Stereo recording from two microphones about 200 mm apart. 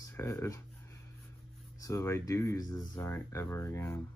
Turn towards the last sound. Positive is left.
turn(degrees=15)  # may be behind; listen again after turning